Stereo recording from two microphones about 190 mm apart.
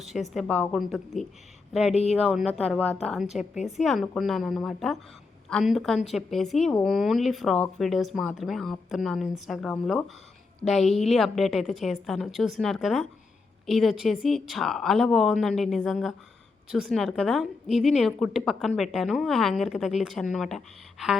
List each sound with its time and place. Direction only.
0.0 s a woman's voice: centre (ahead or behind)
1.9 s a woman's voice: 35° left (ahead or behind)
2.2 s a woman's voice: 5° right (ahead or behind)
3.5 s a woman's voice: 35° left (ahead or behind)
3.8 s a woman's voice: centre (ahead or behind)